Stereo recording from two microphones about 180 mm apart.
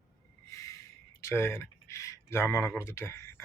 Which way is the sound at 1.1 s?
15° left (ahead or behind).